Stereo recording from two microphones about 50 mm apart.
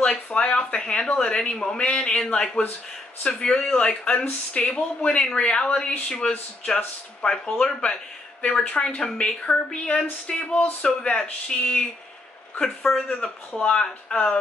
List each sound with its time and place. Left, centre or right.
0.0 s speech: left